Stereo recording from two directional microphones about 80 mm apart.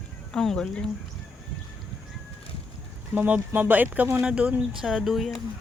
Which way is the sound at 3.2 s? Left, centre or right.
Centre.